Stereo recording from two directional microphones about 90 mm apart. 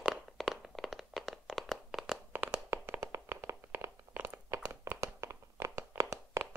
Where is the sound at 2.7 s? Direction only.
35° right (ahead or behind).